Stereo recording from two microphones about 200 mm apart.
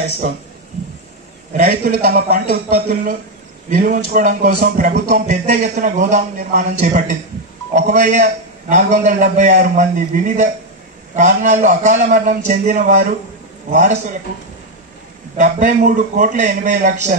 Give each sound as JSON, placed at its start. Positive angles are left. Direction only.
{"t": 1.5, "sound": "a man's voice", "side_deg": -45}
{"t": 3.7, "sound": "music", "side_deg": -40}
{"t": 15.3, "sound": "music", "side_deg": -40}